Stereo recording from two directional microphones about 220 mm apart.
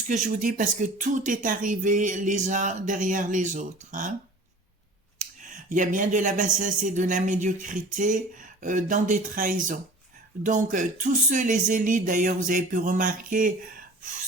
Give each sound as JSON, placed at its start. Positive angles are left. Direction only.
{"t": 0.1, "sound": "a man's voice", "side_deg": -35}
{"t": 5.4, "sound": "a man's voice", "side_deg": -35}